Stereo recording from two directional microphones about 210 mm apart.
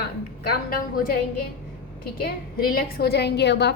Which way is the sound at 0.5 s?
45° left (ahead or behind).